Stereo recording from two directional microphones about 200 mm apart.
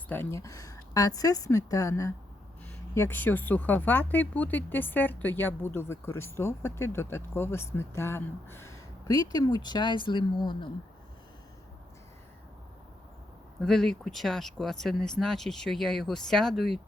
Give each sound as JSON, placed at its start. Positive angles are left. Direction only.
{"t": 0.1, "sound": "speech", "side_deg": 10}
{"t": 13.6, "sound": "speech", "side_deg": 5}